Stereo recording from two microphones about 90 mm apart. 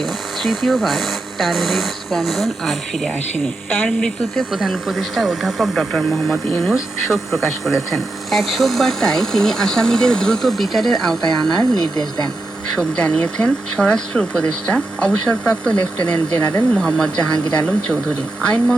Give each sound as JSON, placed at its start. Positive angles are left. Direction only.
{"t": 0.0, "sound": "speech", "side_deg": 0}
{"t": 11.8, "sound": "speech", "side_deg": 50}
{"t": 12.7, "sound": "speech", "side_deg": 10}